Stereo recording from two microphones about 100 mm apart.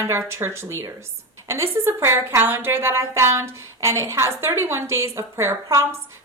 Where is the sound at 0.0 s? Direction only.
25° right (ahead or behind).